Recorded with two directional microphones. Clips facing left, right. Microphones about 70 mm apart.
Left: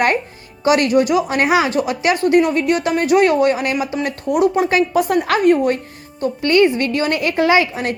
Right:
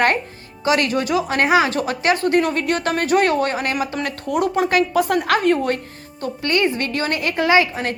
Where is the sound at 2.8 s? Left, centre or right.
Right.